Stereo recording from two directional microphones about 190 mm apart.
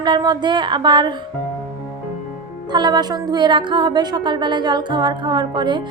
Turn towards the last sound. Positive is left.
turn(degrees=-25)  # may be behind; listen again after turning